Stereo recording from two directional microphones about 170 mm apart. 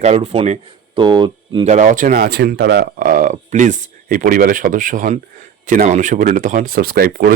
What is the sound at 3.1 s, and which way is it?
Speech, 50° right (ahead or behind).